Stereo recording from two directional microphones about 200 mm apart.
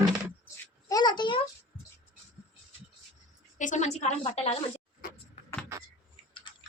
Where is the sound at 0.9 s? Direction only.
20° left (ahead or behind).